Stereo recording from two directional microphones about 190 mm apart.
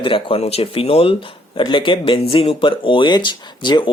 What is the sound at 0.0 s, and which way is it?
Speech, 25° left (ahead or behind).